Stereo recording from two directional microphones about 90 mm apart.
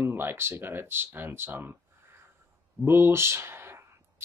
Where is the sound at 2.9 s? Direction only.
25° right (ahead or behind).